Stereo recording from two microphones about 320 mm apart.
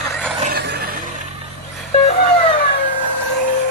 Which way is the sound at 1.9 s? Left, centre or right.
Left.